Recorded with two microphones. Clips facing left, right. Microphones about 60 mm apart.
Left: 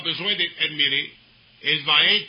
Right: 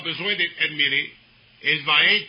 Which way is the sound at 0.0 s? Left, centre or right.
Right.